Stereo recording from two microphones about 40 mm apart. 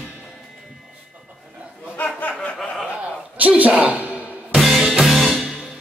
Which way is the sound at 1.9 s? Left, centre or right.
Left.